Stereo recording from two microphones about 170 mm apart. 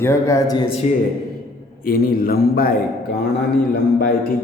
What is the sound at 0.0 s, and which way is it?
Speech, 15° left (ahead or behind).